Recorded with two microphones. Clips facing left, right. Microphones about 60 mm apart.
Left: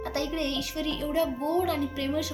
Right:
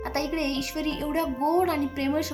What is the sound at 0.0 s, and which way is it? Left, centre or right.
Speech, right.